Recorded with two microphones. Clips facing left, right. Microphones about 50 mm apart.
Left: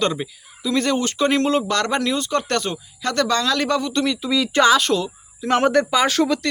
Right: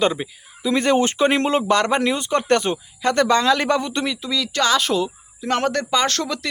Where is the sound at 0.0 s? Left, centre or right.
Centre.